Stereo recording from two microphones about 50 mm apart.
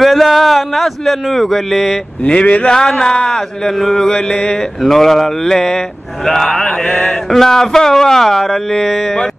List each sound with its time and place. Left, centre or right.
0.0 s speech: centre
2.2 s speech: left
2.7 s a man's voice: centre
4.8 s a man's voice: centre
6.9 s speech: left
7.2 s a man's voice: centre